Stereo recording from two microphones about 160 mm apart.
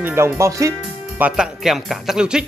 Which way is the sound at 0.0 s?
15° right (ahead or behind).